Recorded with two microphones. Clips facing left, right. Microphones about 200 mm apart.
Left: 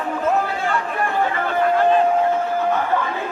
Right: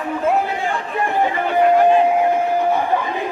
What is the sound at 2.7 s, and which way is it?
Chatter, 15° right (ahead or behind).